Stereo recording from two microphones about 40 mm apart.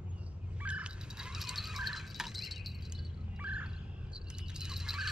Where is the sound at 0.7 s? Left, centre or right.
Right.